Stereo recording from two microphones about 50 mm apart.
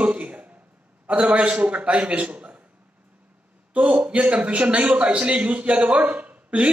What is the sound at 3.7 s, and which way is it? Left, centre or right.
A man's voice, right.